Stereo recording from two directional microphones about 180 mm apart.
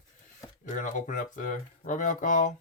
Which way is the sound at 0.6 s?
45° left (ahead or behind).